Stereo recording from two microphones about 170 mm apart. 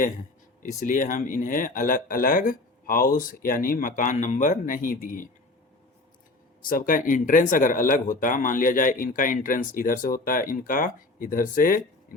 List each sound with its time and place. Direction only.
0.6 s speech: 45° left (ahead or behind)
6.6 s speech: 55° left (ahead or behind)